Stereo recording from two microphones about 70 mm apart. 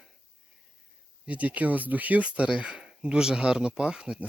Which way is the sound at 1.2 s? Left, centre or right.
Right.